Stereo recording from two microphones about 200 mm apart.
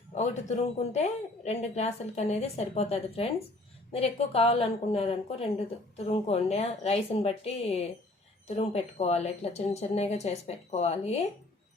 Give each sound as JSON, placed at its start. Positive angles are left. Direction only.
{"t": 0.1, "sound": "a woman's voice", "side_deg": 35}